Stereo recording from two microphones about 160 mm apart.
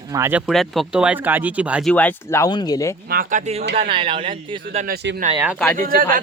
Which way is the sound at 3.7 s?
35° right (ahead or behind).